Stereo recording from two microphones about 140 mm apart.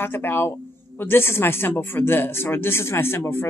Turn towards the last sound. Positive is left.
turn(degrees=15)  # may be behind; listen again after turning